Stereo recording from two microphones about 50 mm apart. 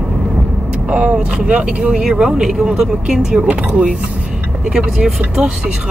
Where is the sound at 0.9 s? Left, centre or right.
Right; by 3.4 s centre.